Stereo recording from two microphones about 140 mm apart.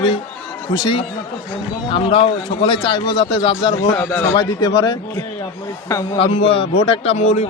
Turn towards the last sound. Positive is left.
turn(degrees=50)  # may be behind; listen again after turning